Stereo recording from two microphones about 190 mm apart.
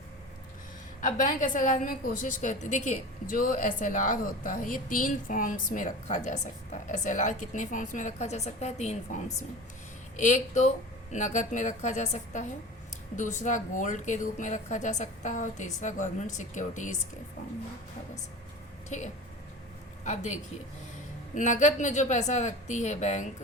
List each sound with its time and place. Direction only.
1.0 s a woman's voice: 40° left (ahead or behind)
18.9 s a woman's voice: 40° left (ahead or behind)